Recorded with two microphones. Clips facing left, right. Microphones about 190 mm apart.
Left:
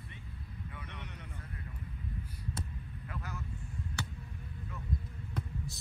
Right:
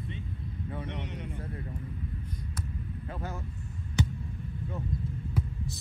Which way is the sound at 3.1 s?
30° right (ahead or behind).